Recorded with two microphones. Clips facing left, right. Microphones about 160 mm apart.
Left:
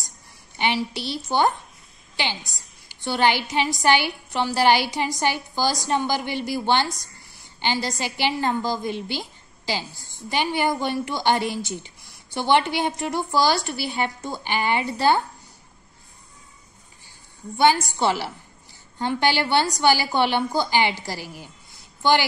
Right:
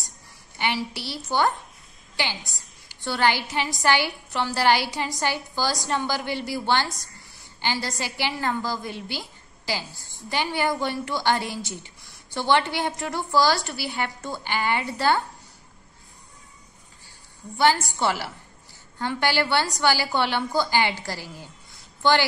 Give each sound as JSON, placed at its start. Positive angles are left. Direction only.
{"t": 0.6, "sound": "a woman's voice", "side_deg": 20}
{"t": 2.5, "sound": "a woman's voice", "side_deg": 20}
{"t": 17.6, "sound": "a woman's voice", "side_deg": 20}